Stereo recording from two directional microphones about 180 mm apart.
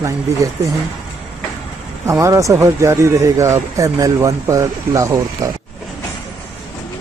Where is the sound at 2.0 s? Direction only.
15° right (ahead or behind).